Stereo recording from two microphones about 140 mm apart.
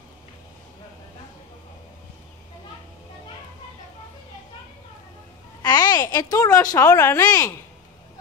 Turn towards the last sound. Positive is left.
turn(degrees=20)  # may be behind; listen again after turning